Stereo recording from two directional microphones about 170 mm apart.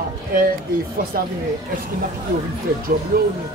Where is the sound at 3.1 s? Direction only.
60° right (ahead or behind).